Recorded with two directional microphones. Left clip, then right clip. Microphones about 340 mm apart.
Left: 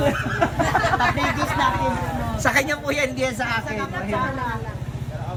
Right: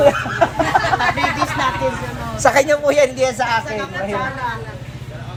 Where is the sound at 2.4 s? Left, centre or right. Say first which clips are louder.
Right 8 dB; centre.